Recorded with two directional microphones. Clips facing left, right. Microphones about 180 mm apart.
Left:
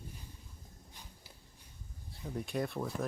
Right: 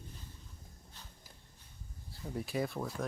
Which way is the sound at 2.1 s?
Centre (ahead or behind).